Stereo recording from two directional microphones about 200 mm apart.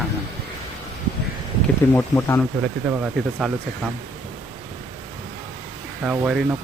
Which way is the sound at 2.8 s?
5° right (ahead or behind).